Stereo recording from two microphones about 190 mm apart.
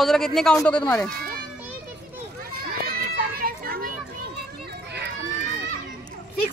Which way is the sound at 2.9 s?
50° right (ahead or behind).